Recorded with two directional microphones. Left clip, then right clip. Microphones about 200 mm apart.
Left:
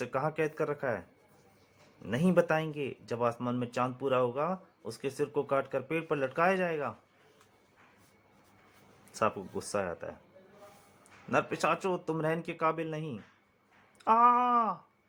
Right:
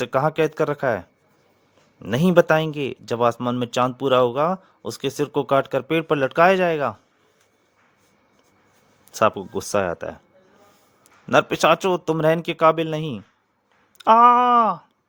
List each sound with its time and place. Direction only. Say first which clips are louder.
0.0 s speech: right 12 dB; 50° right (ahead or behind)
9.1 s speech: right 12 dB; 45° right (ahead or behind)
11.3 s speech: right 13 dB; 45° right (ahead or behind)